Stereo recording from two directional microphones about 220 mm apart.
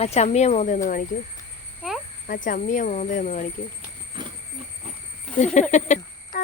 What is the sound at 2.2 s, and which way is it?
Speech, 40° left (ahead or behind).